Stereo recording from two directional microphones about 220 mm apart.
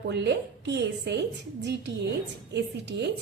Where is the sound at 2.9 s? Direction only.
50° right (ahead or behind).